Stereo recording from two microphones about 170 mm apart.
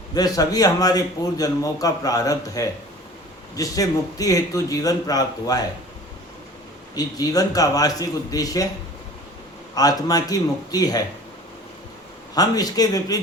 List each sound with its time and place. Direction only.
0.1 s a man's voice: 20° left (ahead or behind)
6.9 s a man's voice: 20° left (ahead or behind)
9.7 s a man's voice: 20° left (ahead or behind)
12.3 s a man's voice: 20° left (ahead or behind)